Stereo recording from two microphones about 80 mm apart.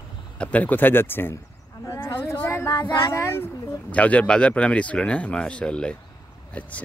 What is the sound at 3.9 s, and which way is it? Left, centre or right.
Speech, centre.